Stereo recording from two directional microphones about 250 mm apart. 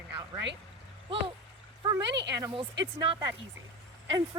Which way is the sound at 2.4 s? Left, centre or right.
Centre.